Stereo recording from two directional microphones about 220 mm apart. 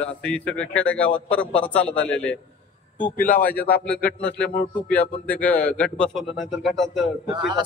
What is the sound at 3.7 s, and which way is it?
A man's voice, 5° left (ahead or behind).